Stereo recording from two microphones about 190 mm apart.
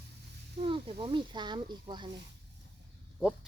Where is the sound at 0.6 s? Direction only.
30° right (ahead or behind).